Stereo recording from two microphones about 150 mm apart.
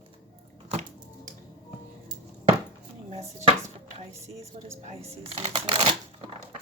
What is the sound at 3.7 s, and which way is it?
Chopping, 40° right (ahead or behind).